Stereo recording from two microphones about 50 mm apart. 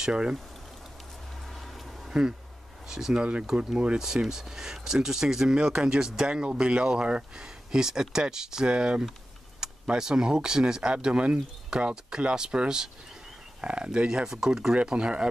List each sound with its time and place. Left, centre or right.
0.0 s speech: centre
1.5 s a sound: centre
2.9 s speech: centre
9.6 s computer keyboard: centre
9.9 s speech: centre